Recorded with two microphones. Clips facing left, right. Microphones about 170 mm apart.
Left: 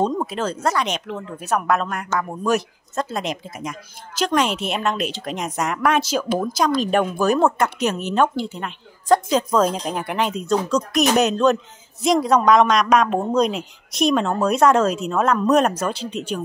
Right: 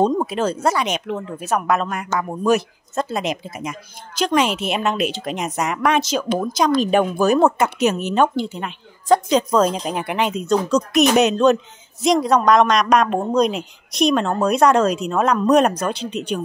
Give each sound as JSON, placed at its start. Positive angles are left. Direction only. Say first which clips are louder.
{"t": 0.0, "sound": "speech", "louder": "right 4 dB", "side_deg": -10}